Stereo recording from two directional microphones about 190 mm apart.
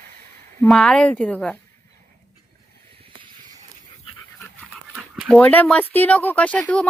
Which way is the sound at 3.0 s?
25° right (ahead or behind).